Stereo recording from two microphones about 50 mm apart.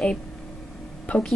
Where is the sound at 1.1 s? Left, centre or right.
Left.